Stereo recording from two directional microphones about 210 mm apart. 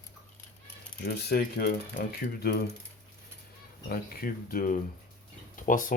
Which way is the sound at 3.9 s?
45° left (ahead or behind).